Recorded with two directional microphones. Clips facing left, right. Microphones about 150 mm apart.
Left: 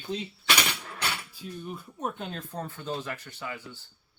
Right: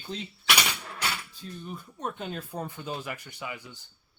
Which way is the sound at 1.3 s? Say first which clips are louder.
Left 2 dB; 10° left (ahead or behind).